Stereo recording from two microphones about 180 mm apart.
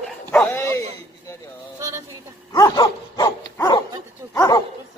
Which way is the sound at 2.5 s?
20° left (ahead or behind).